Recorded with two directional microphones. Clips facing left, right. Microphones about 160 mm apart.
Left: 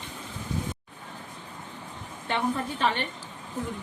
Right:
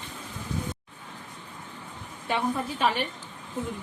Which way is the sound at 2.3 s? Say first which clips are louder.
Even; 10° right (ahead or behind).